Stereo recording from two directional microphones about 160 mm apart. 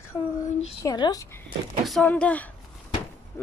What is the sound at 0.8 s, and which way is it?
Speech, 25° left (ahead or behind).